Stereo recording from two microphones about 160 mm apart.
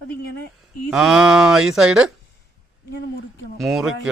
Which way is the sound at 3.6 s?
Centre (ahead or behind).